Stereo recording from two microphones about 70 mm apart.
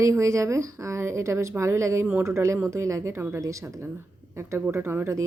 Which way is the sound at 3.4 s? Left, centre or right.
Right.